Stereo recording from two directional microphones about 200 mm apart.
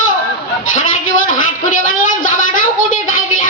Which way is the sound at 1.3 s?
40° left (ahead or behind).